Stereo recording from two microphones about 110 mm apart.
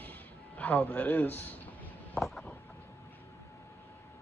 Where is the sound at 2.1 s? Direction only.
5° left (ahead or behind).